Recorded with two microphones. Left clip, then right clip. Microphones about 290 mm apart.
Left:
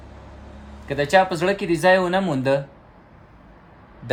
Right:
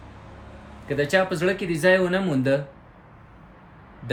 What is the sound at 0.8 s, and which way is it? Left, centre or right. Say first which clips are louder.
Speech: left 4 dB; centre.